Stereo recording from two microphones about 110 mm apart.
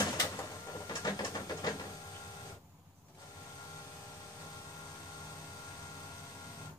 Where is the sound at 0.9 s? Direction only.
40° left (ahead or behind).